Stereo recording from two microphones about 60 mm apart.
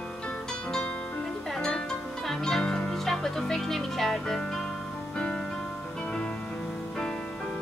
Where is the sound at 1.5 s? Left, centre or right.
Centre.